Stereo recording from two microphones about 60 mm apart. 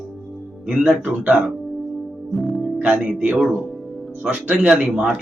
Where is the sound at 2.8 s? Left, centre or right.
Right.